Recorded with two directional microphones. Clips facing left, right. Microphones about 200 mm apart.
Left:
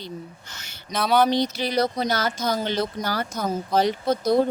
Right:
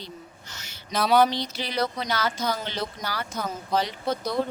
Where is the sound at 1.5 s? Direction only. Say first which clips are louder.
Left 5 dB; 40° left (ahead or behind).